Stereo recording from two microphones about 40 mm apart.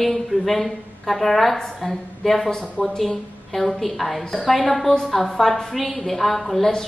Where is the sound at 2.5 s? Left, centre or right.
Centre.